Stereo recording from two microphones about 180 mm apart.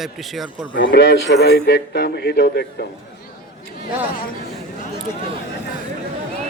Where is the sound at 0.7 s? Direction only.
85° left; by 2.9 s 65° left (ahead or behind).